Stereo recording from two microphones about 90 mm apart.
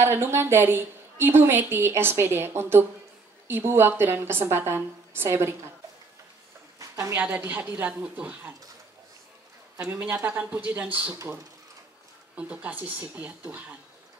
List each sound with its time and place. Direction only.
0.0 s a woman's voice: 30° right (ahead or behind)
6.8 s a sound: 35° right (ahead or behind)
7.2 s a woman's voice: 15° right (ahead or behind)
9.9 s a woman's voice: 15° right (ahead or behind)
12.4 s a woman's voice: 15° right (ahead or behind)